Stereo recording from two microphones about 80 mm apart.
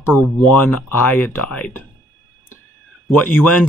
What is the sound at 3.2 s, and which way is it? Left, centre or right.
Speech, left.